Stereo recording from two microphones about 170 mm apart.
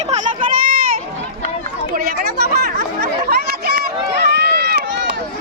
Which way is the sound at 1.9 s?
60° right (ahead or behind).